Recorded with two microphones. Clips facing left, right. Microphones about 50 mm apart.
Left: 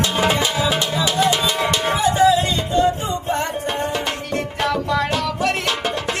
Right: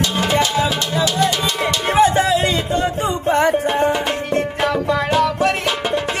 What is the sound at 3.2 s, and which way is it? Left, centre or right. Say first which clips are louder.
Music: right 8 dB; right.